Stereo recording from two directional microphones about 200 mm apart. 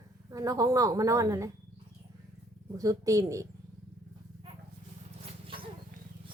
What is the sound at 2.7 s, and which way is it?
Speech, 15° right (ahead or behind).